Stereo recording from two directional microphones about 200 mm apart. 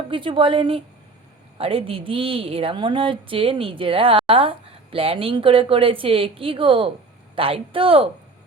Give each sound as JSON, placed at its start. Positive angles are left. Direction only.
{"t": 0.1, "sound": "a woman's voice", "side_deg": -25}